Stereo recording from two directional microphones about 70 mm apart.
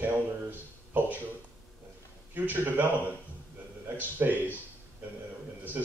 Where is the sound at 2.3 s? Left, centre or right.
Right.